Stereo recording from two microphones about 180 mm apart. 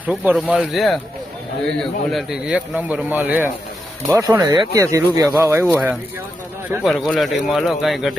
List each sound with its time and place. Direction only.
0.0 s a man's voice: 10° right (ahead or behind)
6.8 s speech: centre (ahead or behind)